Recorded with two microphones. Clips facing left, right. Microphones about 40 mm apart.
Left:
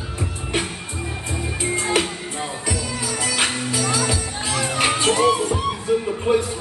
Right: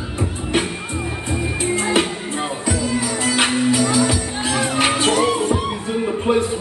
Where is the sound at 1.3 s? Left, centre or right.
Right.